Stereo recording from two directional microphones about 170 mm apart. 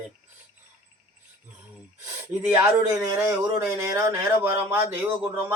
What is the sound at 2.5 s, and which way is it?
Speech, 15° right (ahead or behind).